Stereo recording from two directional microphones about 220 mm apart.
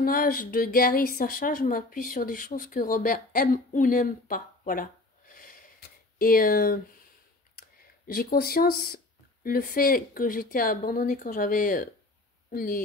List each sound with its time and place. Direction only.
0.0 s speech: 40° left (ahead or behind)
5.3 s gasp: 40° left (ahead or behind)
6.1 s speech: 40° left (ahead or behind)
8.1 s speech: 40° left (ahead or behind)